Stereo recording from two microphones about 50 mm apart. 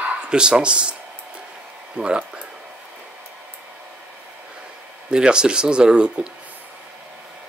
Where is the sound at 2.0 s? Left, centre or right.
Right.